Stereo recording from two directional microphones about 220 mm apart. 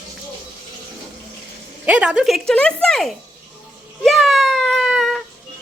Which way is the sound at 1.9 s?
5° right (ahead or behind).